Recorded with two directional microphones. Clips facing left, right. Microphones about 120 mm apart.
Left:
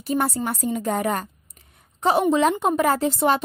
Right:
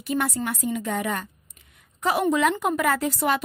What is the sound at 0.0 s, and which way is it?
A woman's voice, 35° left (ahead or behind).